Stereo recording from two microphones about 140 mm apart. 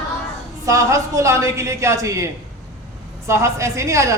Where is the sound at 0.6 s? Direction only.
20° right (ahead or behind).